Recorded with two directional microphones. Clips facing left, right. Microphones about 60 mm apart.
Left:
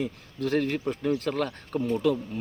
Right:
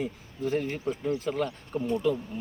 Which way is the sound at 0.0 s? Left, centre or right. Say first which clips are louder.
Left 1 dB; left.